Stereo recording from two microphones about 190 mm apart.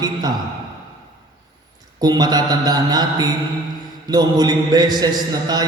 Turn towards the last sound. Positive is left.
turn(degrees=-20)  # may be behind; listen again after turning